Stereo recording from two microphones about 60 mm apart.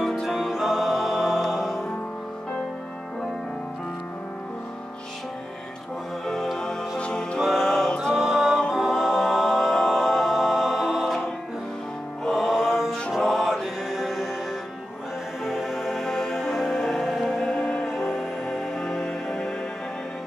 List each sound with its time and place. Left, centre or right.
0.0 s music: centre
6.2 s music: centre
7.0 s music: centre
7.3 s music: centre
8.7 s a capella: centre
12.3 s music: centre
13.2 s mantra: centre
15.4 s music: centre